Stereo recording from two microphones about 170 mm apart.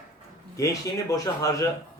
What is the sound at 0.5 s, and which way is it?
Speech, 20° left (ahead or behind).